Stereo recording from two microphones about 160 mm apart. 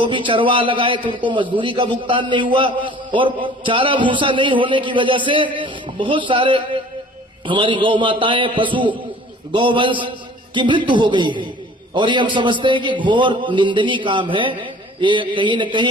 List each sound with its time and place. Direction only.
0.0 s a man's voice: 30° right (ahead or behind)